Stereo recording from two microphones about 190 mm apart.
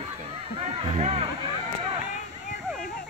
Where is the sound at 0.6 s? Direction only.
35° right (ahead or behind).